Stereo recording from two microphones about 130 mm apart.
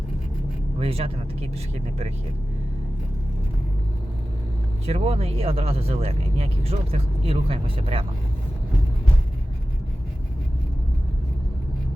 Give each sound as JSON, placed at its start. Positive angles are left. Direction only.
{"t": 0.8, "sound": "speech", "side_deg": -50}
{"t": 4.9, "sound": "speech", "side_deg": -50}